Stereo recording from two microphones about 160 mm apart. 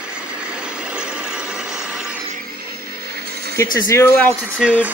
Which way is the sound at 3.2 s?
85° right.